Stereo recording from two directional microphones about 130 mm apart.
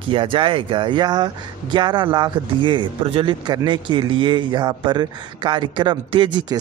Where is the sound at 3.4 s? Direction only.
30° right (ahead or behind).